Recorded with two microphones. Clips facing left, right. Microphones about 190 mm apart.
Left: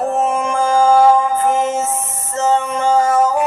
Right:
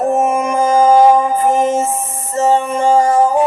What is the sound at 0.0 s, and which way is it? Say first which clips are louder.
Music: right 3 dB; 15° right (ahead or behind).